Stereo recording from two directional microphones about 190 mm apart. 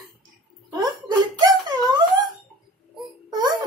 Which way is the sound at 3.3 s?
20° right (ahead or behind).